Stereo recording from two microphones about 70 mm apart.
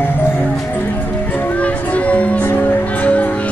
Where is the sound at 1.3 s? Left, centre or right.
Left.